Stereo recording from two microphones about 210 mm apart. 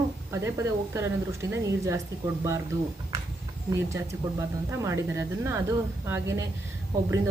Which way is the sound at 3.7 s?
15° right (ahead or behind).